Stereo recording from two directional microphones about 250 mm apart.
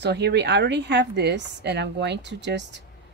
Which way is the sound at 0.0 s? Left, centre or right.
Right.